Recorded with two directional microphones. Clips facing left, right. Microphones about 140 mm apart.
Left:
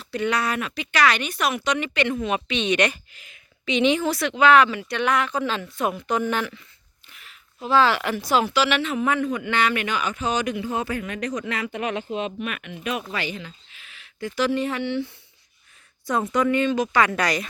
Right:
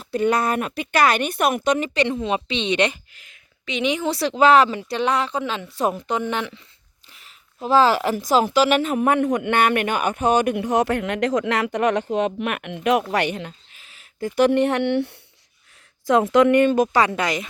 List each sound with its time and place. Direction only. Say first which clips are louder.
0.0 s a woman's voice: right 4 dB; 45° right (ahead or behind); by 3.0 s 25° right (ahead or behind)
3.1 s a sound: left 2 dB; 5° left (ahead or behind)
3.8 s a woman's voice: left 1 dB; 15° right (ahead or behind)
4.1 s speech: right 5 dB; 35° right (ahead or behind)
5.4 s a woman's voice: even; 15° right (ahead or behind)
5.7 s speech: right 6 dB; 35° right (ahead or behind)
6.0 s a woman's voice: even; 20° right (ahead or behind)
7.1 s speech: left 1 dB; 35° right (ahead or behind); by 13.5 s 60° right (ahead or behind)
13.7 s speech: right 3 dB; 40° right (ahead or behind); by 15.2 s 65° right (ahead or behind)
16.0 s speech: right 7 dB; 90° right; by 17.0 s 50° right (ahead or behind)
17.0 s a woman's voice: right 1 dB; 25° right (ahead or behind)